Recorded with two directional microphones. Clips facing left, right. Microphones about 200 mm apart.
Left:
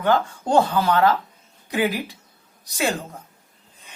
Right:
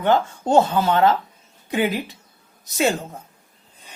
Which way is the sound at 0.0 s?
25° right (ahead or behind).